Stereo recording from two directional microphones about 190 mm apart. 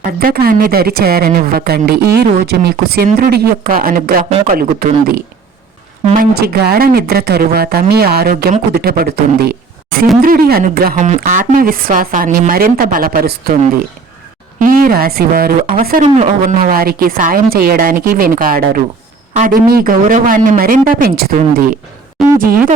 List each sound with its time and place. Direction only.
0.0 s speech: 50° right (ahead or behind)
14.6 s speech: 50° right (ahead or behind)
16.0 s speech: 40° right (ahead or behind)
22.2 s a sound: centre (ahead or behind)